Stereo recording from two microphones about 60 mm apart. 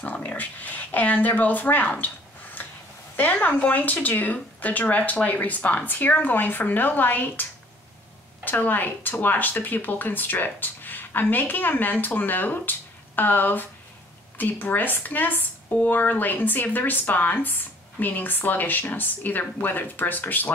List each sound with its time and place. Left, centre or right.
0.0 s speech: left
3.2 s speech: left
8.5 s speech: left